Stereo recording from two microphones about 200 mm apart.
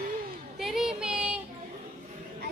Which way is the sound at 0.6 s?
Centre (ahead or behind).